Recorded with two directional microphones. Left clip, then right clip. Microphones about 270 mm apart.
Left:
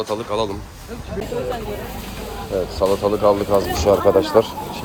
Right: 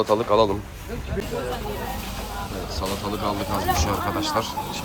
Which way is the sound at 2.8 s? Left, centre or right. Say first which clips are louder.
Left 11 dB; left.